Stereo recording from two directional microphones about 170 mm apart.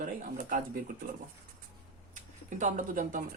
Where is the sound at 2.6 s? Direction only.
50° right (ahead or behind).